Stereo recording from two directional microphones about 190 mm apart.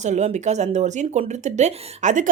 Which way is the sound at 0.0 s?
35° right (ahead or behind).